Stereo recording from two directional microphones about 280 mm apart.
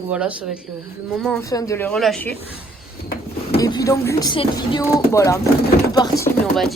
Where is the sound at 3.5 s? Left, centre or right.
Centre.